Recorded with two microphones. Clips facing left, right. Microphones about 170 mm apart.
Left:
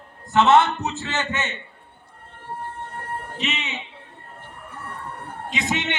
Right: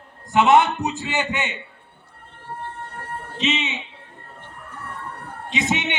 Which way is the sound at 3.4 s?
20° right (ahead or behind).